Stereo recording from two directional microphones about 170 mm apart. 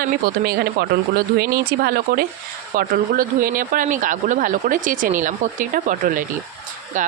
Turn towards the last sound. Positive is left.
turn(degrees=-50)  # may be behind; listen again after turning